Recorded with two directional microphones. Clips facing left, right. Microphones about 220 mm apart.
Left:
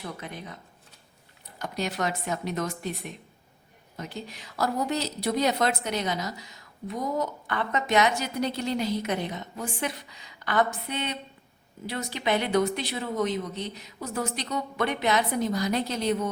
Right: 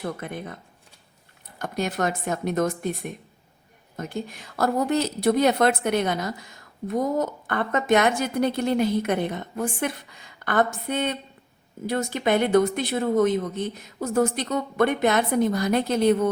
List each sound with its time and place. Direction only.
0.0 s a woman's voice: 55° right (ahead or behind)